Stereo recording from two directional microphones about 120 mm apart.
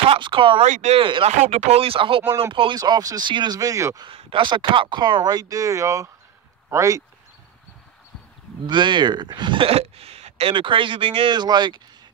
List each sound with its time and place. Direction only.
0.1 s speech: 45° right (ahead or behind)
0.7 s speech: 90° right
0.9 s speech: 45° right (ahead or behind)
1.3 s speech: 70° right (ahead or behind); by 2.8 s 45° right (ahead or behind)
2.8 s speech: 30° right (ahead or behind)
4.1 s speech: 50° right (ahead or behind); by 7.0 s 25° right (ahead or behind)
8.6 s speech: 40° right (ahead or behind); by 10.5 s 60° right (ahead or behind)
10.5 s speech: 45° right (ahead or behind)